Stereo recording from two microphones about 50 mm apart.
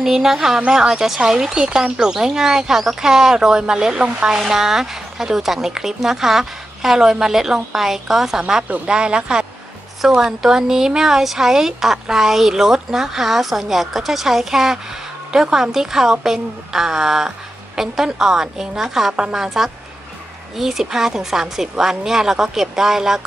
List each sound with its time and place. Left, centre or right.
0.0 s speech: centre